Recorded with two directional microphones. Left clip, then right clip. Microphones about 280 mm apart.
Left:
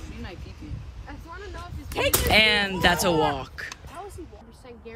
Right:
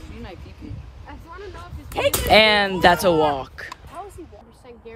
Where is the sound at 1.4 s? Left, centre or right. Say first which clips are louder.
Right 1 dB; right.